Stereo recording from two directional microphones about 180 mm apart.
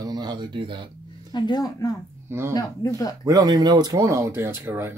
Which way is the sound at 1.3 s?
25° left (ahead or behind).